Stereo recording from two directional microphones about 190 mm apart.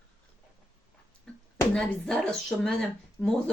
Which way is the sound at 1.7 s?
5° left (ahead or behind).